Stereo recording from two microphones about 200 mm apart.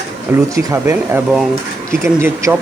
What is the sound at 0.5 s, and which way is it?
Speech, 10° right (ahead or behind).